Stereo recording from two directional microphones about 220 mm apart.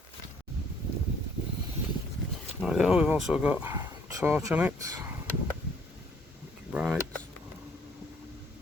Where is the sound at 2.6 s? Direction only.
Centre (ahead or behind).